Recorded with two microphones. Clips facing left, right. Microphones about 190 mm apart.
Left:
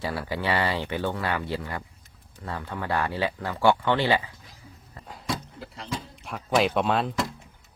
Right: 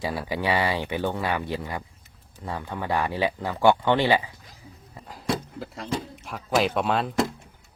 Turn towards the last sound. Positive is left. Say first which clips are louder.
# even
turn(degrees=0)  # may be behind; listen again after turning